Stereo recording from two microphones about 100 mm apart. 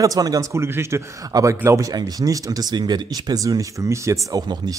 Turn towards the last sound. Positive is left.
turn(degrees=-45)  # may be behind; listen again after turning